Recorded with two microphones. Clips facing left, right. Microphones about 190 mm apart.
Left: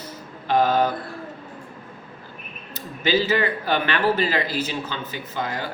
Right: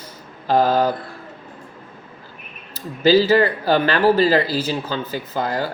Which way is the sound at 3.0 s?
35° right (ahead or behind).